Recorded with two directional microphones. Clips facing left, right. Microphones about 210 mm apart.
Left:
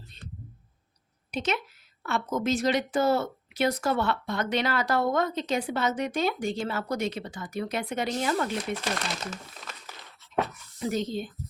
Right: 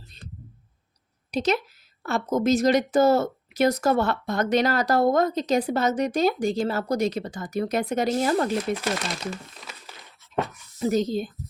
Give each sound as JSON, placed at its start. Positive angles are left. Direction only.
{"t": 1.3, "sound": "speech", "side_deg": -35}
{"t": 8.8, "sound": "speech", "side_deg": -5}
{"t": 10.8, "sound": "speech", "side_deg": -40}